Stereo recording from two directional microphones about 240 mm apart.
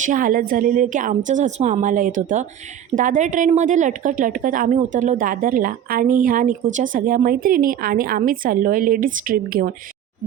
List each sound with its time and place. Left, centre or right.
0.0 s a woman's voice: right